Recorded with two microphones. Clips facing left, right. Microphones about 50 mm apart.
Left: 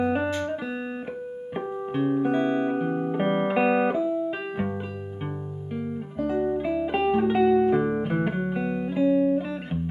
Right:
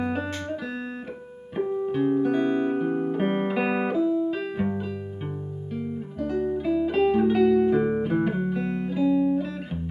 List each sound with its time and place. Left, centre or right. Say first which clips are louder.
0.1 s music: left 4 dB; centre
1.6 s music: right 3 dB; centre
5.8 s music: left 1 dB; centre
8.9 s music: left 1 dB; left